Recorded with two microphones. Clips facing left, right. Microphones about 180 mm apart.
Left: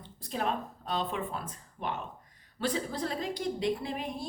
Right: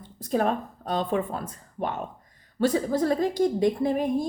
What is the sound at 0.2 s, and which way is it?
A woman's voice, 45° right (ahead or behind).